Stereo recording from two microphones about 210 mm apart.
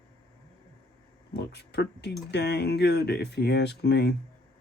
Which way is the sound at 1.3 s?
55° left (ahead or behind).